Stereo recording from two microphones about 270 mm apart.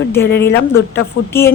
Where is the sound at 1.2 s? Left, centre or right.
Left.